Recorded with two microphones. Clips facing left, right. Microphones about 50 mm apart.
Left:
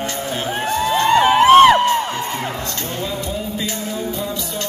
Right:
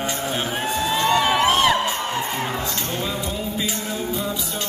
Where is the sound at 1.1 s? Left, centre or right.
Left.